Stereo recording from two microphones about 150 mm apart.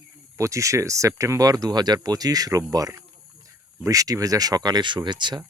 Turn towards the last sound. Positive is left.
turn(degrees=-30)  # may be behind; listen again after turning